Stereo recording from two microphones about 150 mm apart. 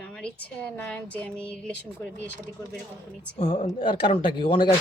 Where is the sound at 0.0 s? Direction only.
5° left (ahead or behind).